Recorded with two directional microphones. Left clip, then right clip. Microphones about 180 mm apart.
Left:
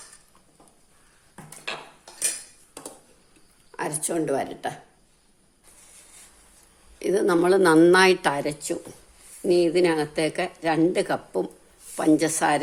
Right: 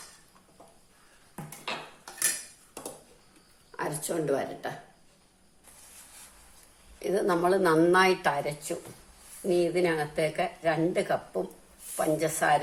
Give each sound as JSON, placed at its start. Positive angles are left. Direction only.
{"t": 3.8, "sound": "speech", "side_deg": 45}
{"t": 7.0, "sound": "speech", "side_deg": 55}